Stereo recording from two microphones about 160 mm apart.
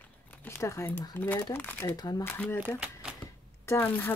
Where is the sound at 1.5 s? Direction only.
10° left (ahead or behind).